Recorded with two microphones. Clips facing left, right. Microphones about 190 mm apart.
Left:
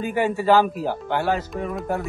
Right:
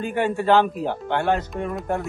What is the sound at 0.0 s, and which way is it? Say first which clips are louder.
Speech: left 1 dB; 5° left (ahead or behind).